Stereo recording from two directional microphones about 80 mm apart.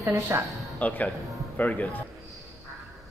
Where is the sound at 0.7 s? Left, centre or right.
Centre.